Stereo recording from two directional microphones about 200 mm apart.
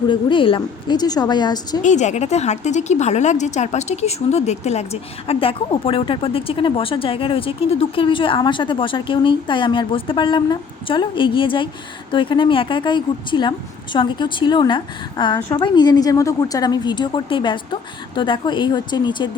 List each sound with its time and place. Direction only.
0.1 s speech: 25° left (ahead or behind)
1.8 s speech: 35° left (ahead or behind)